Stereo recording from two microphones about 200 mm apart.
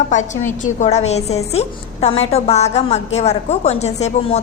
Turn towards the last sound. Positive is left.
turn(degrees=30)  # may be behind; listen again after turning